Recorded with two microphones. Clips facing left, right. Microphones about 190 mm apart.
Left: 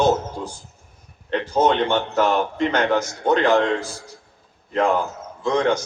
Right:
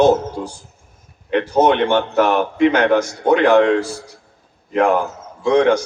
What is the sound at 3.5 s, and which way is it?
Speech, 65° right (ahead or behind).